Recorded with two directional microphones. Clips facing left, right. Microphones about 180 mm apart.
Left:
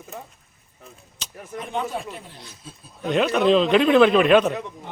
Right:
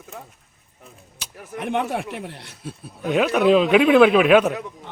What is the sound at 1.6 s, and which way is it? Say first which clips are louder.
A man's voice: right 4 dB; 70° right (ahead or behind).